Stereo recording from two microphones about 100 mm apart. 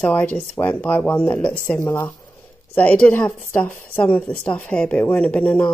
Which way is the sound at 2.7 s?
15° left (ahead or behind).